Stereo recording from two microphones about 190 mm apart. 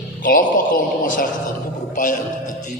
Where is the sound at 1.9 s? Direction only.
45° left (ahead or behind).